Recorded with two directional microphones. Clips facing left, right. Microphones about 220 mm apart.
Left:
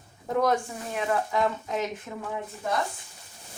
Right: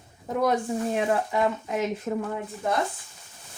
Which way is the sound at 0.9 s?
30° right (ahead or behind).